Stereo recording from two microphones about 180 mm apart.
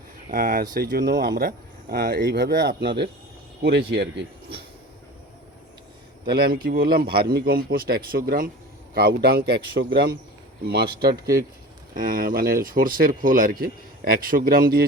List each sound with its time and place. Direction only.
0.3 s speech: 50° right (ahead or behind); by 4.2 s 70° right (ahead or behind)
6.2 s speech: 60° right (ahead or behind)
11.9 s speech: 55° right (ahead or behind)